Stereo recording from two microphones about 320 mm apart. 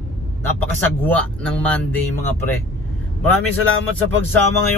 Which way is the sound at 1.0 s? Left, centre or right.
Centre.